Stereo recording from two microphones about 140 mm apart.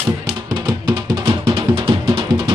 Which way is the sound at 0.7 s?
30° right (ahead or behind).